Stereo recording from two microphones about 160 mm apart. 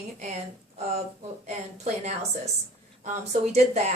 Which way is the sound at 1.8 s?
45° right (ahead or behind).